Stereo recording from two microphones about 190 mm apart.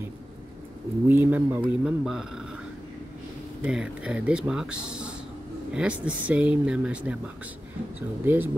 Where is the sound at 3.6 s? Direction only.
5° right (ahead or behind).